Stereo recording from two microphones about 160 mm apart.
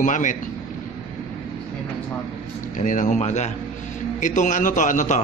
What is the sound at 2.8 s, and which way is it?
A man's voice, 50° left (ahead or behind).